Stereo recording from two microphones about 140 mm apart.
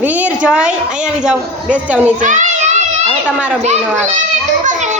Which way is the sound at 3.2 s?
10° right (ahead or behind).